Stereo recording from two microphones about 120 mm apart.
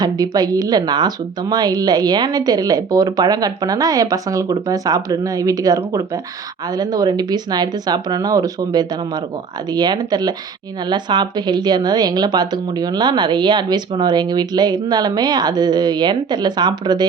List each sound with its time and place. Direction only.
0.0 s a woman's voice: 35° right (ahead or behind)